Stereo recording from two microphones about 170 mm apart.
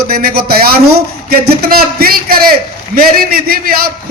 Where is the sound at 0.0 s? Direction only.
60° right (ahead or behind).